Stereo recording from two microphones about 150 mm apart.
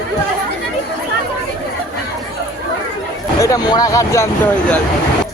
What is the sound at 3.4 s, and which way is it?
Speech, 25° left (ahead or behind).